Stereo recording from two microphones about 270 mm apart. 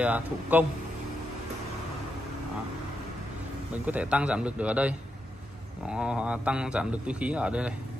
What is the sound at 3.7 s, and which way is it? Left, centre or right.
Speech, centre.